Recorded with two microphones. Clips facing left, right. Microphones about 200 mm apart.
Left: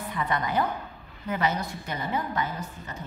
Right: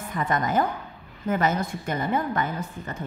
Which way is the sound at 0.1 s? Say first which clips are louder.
Right 4 dB; 45° right (ahead or behind).